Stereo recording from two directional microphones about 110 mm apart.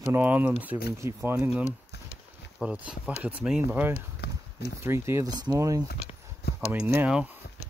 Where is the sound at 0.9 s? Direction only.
25° right (ahead or behind).